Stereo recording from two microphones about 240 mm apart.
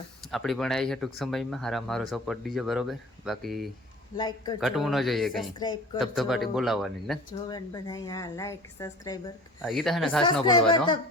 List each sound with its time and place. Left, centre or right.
0.3 s speech: centre
4.2 s a woman's voice: centre
4.6 s speech: centre
5.5 s a woman's voice: centre
6.0 s speech: centre
7.5 s a woman's voice: centre
9.6 s speech: centre
10.7 s speech: centre